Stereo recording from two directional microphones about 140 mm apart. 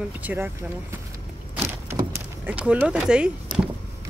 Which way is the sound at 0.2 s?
10° right (ahead or behind).